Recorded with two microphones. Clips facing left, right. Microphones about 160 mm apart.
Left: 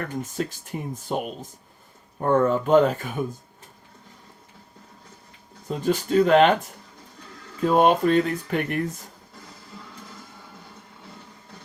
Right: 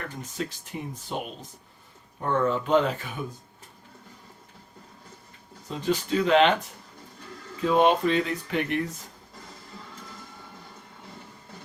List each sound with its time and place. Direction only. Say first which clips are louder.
0.2 s speech: left 5 dB; 45° left (ahead or behind)
5.6 s speech: left 3 dB; 50° left (ahead or behind)